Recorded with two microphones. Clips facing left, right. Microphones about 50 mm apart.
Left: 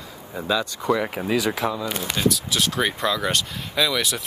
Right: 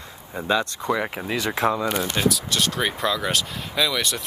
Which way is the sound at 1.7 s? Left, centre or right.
Right.